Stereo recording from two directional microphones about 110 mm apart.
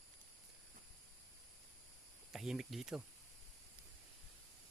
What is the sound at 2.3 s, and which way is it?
Speech, 5° right (ahead or behind).